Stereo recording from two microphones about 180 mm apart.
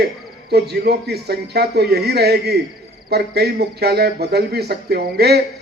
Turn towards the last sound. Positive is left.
turn(degrees=-65)  # may be behind; listen again after turning